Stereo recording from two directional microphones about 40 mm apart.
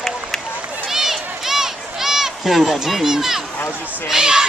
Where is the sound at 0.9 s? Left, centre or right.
Centre.